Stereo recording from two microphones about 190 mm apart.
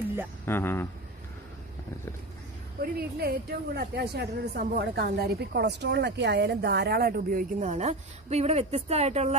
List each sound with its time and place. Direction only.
0.5 s speech: 10° left (ahead or behind)
2.8 s a woman's voice: 55° right (ahead or behind); by 9.3 s 35° right (ahead or behind)